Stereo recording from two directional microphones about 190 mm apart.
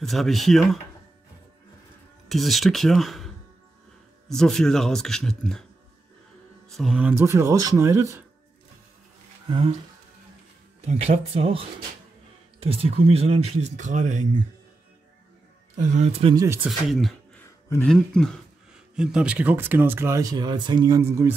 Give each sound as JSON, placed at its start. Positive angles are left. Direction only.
{"t": 0.0, "sound": "speech", "side_deg": 0}
{"t": 2.2, "sound": "speech", "side_deg": 0}
{"t": 4.4, "sound": "speech", "side_deg": 0}
{"t": 6.7, "sound": "speech", "side_deg": 0}
{"t": 9.5, "sound": "speech", "side_deg": -30}
{"t": 10.8, "sound": "speech", "side_deg": -35}
{"t": 15.7, "sound": "speech", "side_deg": -35}
{"t": 16.6, "sound": "speech", "side_deg": 0}
{"t": 17.6, "sound": "speech", "side_deg": 10}